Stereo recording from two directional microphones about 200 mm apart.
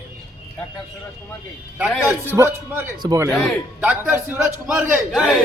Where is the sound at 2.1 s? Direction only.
10° right (ahead or behind).